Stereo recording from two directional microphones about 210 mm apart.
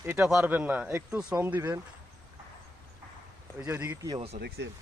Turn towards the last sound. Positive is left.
turn(degrees=-50)  # may be behind; listen again after turning